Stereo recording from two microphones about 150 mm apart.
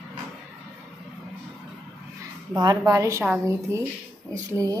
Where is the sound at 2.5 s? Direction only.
25° right (ahead or behind).